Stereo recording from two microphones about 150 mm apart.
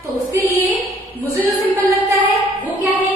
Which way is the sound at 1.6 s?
35° left (ahead or behind).